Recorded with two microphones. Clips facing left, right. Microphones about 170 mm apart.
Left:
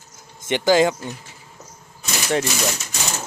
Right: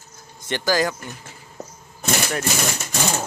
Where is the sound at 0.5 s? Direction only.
20° left (ahead or behind).